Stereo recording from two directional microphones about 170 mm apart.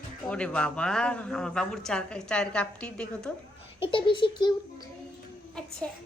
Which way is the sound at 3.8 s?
30° left (ahead or behind).